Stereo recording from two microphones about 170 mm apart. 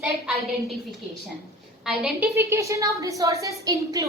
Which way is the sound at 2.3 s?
15° right (ahead or behind).